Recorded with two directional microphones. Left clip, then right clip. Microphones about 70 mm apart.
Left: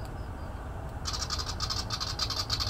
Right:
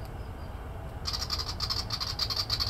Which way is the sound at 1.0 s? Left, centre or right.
Right.